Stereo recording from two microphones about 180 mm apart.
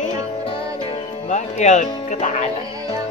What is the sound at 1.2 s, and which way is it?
Music, 40° left (ahead or behind).